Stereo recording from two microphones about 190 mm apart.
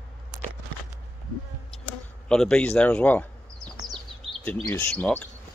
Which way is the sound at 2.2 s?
5° left (ahead or behind).